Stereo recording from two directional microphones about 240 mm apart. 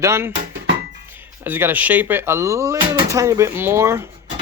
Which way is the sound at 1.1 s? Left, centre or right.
Centre.